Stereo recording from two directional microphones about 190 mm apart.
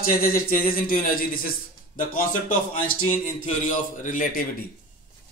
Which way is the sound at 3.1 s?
40° left (ahead or behind).